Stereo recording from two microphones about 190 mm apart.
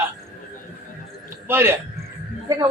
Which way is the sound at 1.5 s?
10° right (ahead or behind).